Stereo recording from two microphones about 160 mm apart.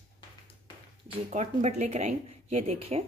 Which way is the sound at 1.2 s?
50° right (ahead or behind).